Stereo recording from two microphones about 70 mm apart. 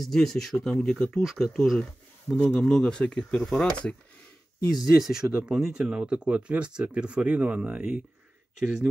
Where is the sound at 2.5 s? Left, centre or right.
Centre.